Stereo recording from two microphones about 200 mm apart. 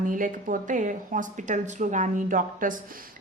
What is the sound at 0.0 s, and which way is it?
A woman's voice, 40° right (ahead or behind).